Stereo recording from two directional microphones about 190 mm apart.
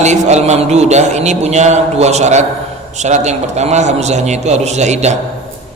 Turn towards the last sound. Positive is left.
turn(degrees=-35)  # may be behind; listen again after turning